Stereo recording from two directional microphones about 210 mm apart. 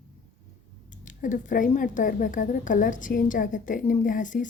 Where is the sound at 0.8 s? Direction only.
35° left (ahead or behind).